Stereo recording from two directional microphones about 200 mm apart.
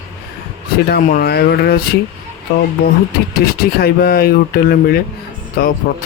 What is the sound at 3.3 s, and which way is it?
Speech, 50° left (ahead or behind).